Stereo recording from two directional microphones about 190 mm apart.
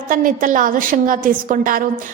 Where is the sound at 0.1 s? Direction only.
45° right (ahead or behind).